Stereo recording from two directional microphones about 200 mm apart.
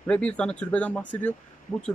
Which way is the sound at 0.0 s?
5° left (ahead or behind).